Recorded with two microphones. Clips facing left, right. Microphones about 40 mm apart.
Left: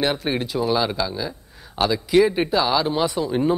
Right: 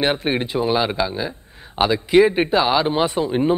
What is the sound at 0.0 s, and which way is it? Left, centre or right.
Speech, right.